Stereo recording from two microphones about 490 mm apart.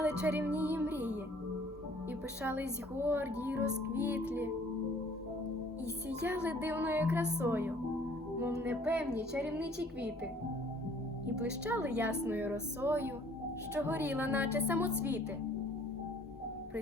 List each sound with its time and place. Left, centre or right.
0.0 s music: centre
2.4 s speech: centre
6.2 s speech: centre
9.6 s a woman's voice: centre
11.4 s speech: centre